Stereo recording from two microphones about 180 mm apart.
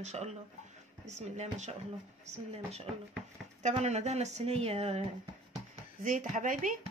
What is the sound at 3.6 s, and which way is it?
Speech, 35° right (ahead or behind).